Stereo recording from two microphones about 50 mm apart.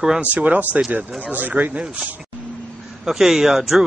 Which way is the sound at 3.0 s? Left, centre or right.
Centre.